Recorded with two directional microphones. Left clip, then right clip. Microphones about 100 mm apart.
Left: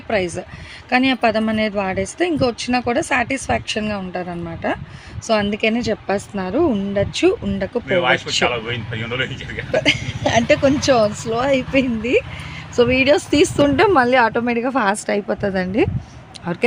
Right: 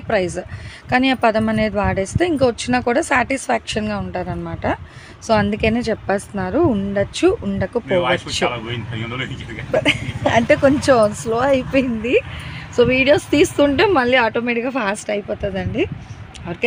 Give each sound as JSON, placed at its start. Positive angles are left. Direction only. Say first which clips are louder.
{"t": 0.1, "sound": "speech", "louder": "right 1 dB", "side_deg": -5}
{"t": 7.9, "sound": "speech", "louder": "left 2 dB", "side_deg": 20}
{"t": 8.3, "sound": "speech", "louder": "left 2 dB", "side_deg": 0}
{"t": 10.2, "sound": "speech", "louder": "right 1 dB", "side_deg": -10}
{"t": 15.3, "sound": "speech", "louder": "left 3 dB", "side_deg": 50}